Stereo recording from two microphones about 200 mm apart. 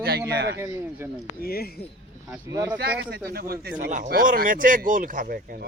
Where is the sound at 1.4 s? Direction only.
50° left (ahead or behind).